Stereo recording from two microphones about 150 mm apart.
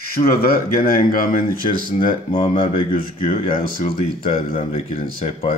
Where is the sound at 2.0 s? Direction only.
35° left (ahead or behind).